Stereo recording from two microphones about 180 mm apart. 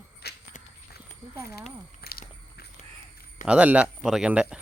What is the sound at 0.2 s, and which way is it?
Walk, 65° left (ahead or behind).